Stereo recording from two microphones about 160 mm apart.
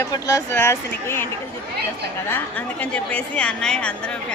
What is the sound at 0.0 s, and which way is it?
A woman's voice, 20° left (ahead or behind).